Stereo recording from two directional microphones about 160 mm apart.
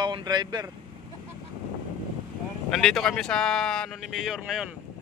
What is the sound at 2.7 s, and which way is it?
Speech, 5° left (ahead or behind).